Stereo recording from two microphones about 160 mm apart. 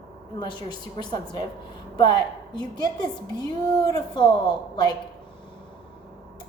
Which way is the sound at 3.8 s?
25° left (ahead or behind).